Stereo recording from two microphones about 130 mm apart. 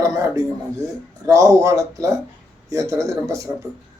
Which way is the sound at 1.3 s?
25° right (ahead or behind).